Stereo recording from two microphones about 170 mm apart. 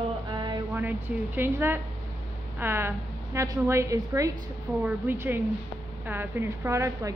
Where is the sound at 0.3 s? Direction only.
25° right (ahead or behind).